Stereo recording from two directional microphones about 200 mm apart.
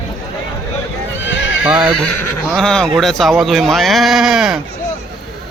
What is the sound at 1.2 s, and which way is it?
Neigh, 70° left (ahead or behind).